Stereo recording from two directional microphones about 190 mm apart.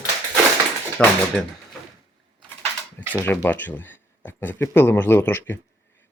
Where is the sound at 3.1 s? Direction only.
10° left (ahead or behind).